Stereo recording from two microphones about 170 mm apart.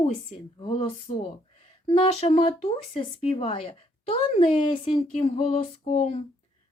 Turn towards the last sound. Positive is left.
turn(degrees=40)  # may be behind; listen again after turning